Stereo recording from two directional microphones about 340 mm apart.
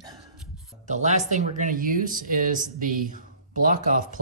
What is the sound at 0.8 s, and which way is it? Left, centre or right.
Speech, right.